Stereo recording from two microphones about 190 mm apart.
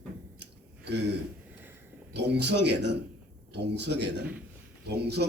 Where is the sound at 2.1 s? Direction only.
65° right (ahead or behind).